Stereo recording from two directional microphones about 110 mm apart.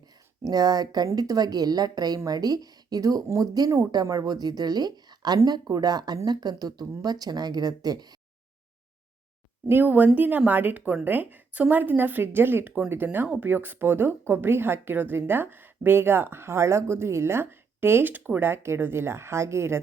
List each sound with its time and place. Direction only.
0.4 s a woman's voice: 35° right (ahead or behind)
9.6 s a woman's voice: 20° right (ahead or behind)